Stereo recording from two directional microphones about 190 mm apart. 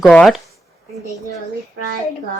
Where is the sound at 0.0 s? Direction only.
Centre (ahead or behind).